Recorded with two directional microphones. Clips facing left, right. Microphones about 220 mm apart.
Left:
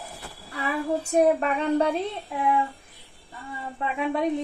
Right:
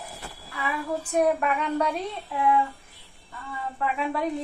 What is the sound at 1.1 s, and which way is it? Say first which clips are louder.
Speech: left 2 dB; 30° left (ahead or behind).